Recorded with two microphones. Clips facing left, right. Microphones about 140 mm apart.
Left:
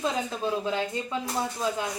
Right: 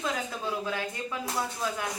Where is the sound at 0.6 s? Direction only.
20° left (ahead or behind).